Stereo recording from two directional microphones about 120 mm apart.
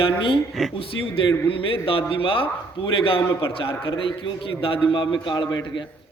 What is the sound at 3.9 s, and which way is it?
A man's voice, 45° left (ahead or behind).